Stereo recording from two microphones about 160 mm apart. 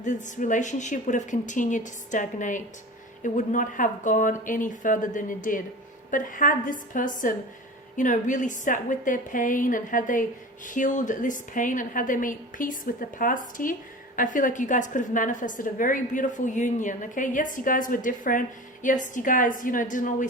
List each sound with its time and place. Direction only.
0.0 s a woman's voice: 50° left (ahead or behind)